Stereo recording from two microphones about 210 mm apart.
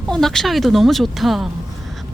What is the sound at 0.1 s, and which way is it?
Speech, centre (ahead or behind).